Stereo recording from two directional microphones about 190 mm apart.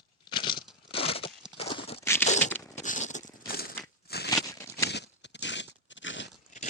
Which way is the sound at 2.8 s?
40° left (ahead or behind).